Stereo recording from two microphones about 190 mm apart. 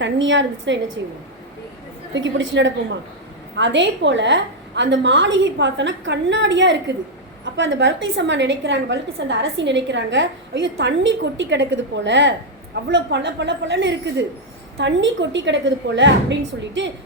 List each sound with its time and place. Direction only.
0.0 s a woman's voice: 75° right (ahead or behind)
2.1 s a woman's voice: 75° right (ahead or behind)